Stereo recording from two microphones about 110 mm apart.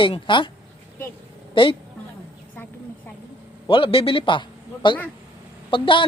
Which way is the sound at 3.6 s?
50° left (ahead or behind).